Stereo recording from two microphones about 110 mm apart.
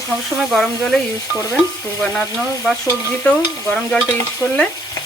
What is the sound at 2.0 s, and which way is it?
Speech, centre (ahead or behind).